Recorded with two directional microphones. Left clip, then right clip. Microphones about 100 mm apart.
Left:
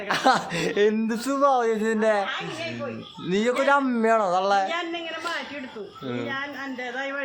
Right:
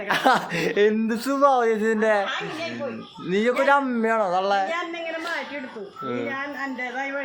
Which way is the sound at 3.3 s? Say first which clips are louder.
Right 2 dB; 25° left (ahead or behind).